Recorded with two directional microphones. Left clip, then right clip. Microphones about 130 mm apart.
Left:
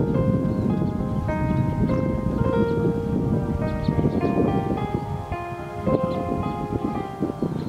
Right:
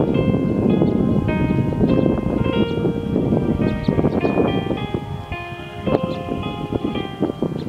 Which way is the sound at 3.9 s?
40° right (ahead or behind).